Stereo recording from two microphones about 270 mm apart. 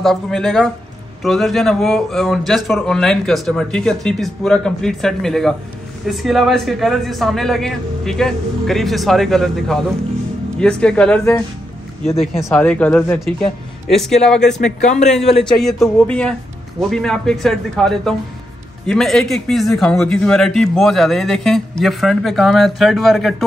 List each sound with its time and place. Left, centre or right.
0.0 s a man's voice: centre
14.6 s speech: left
15.4 s a man's voice: centre